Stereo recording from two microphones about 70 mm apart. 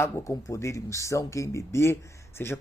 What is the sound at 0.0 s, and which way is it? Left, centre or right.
Speech, left.